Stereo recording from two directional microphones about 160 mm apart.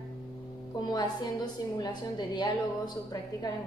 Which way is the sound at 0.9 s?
25° left (ahead or behind).